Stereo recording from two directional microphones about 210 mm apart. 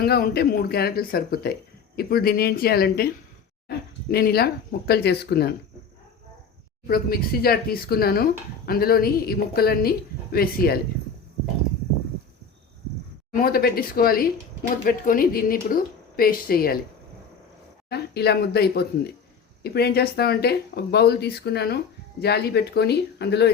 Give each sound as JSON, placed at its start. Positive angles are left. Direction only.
{"t": 0.0, "sound": "speech", "side_deg": 50}
{"t": 4.1, "sound": "speech", "side_deg": 50}
{"t": 6.8, "sound": "speech", "side_deg": 45}
{"t": 13.3, "sound": "speech", "side_deg": 45}
{"t": 17.8, "sound": "speech", "side_deg": 50}